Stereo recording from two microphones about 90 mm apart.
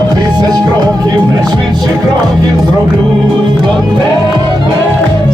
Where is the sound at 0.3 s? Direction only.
50° right (ahead or behind).